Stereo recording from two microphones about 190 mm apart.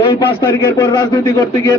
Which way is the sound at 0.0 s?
25° left (ahead or behind).